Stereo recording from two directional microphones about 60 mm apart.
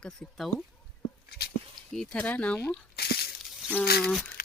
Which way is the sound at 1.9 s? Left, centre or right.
Centre.